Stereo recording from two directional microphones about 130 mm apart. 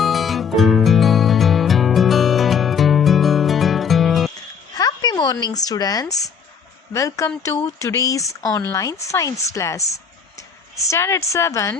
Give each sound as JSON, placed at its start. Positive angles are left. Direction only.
{"t": 0.0, "sound": "music", "side_deg": 0}
{"t": 4.7, "sound": "a sound", "side_deg": 30}
{"t": 6.9, "sound": "speech", "side_deg": 25}